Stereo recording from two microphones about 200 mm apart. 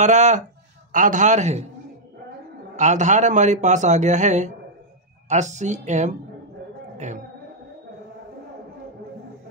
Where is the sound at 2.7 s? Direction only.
35° right (ahead or behind).